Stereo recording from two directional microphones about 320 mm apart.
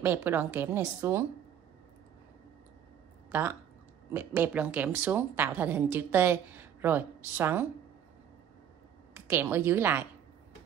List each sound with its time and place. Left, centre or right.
0.0 s a woman's voice: centre
3.3 s a woman's voice: centre
9.1 s a woman's voice: centre